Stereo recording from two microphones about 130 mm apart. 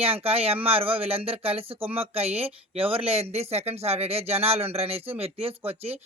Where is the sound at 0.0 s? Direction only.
50° right (ahead or behind).